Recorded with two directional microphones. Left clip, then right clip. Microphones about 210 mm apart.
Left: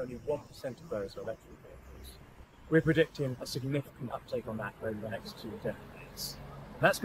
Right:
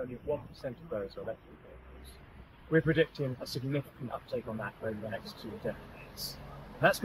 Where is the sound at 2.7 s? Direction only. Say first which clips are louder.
Left 1 dB; 40° left (ahead or behind).